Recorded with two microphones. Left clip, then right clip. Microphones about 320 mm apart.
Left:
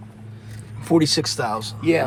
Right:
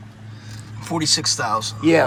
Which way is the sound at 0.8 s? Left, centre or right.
Centre.